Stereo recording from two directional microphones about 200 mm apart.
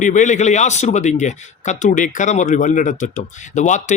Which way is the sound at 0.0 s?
40° left (ahead or behind).